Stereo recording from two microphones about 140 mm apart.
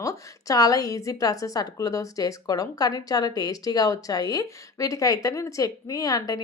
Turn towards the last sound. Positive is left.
turn(degrees=25)  # may be behind; listen again after turning